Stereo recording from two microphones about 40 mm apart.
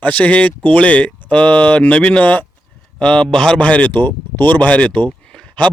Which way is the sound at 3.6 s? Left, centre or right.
Left.